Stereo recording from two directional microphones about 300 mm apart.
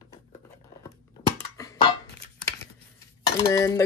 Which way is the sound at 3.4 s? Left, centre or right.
Centre.